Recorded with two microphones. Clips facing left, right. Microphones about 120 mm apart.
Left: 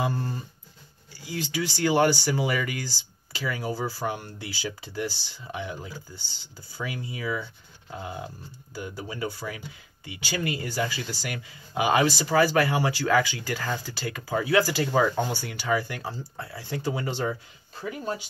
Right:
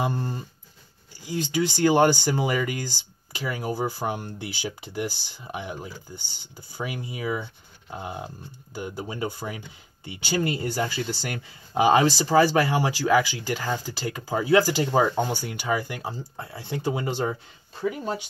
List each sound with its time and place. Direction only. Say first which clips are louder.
0.0 s a sound: right 1 dB; 20° right (ahead or behind)
1.4 s speech: right 5 dB; 20° right (ahead or behind)
3.3 s speech: right 2 dB; 15° right (ahead or behind)